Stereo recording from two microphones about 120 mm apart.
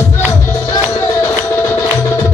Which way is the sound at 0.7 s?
20° left (ahead or behind).